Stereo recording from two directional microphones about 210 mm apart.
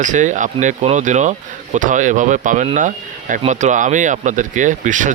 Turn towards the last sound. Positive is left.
turn(degrees=-35)  # may be behind; listen again after turning